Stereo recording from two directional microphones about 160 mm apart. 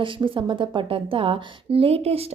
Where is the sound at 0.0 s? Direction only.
30° right (ahead or behind).